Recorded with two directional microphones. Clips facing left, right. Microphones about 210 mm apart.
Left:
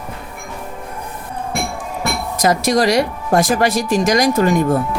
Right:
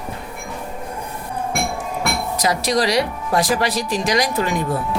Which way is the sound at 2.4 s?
50° left (ahead or behind).